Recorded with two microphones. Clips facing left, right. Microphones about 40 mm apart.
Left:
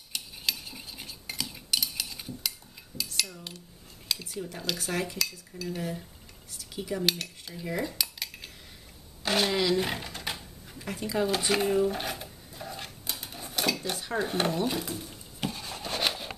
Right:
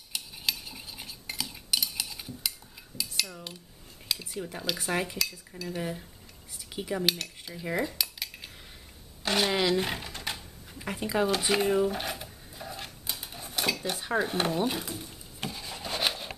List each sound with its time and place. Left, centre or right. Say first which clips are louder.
0.1 s cutlery: even; centre
7.1 s cutlery: even; centre
9.2 s a woman's voice: even; centre
9.5 s typewriter: even; centre
10.8 s cutlery: right 1 dB; centre
11.2 s a sound: even; centre
13.9 s cutlery: right 3 dB; centre
14.2 s rub: left 3 dB; centre